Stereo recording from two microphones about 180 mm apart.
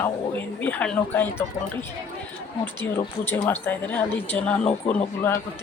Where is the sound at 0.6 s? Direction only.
10° left (ahead or behind).